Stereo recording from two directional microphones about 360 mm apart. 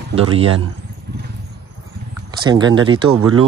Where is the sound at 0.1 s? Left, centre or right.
Centre.